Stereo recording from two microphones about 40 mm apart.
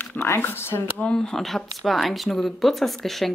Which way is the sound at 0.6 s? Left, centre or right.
Left.